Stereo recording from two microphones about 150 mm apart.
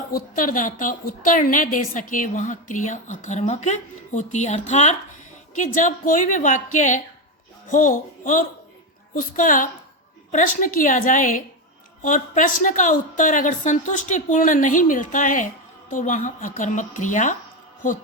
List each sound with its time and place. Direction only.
0.1 s a woman's voice: 65° left (ahead or behind)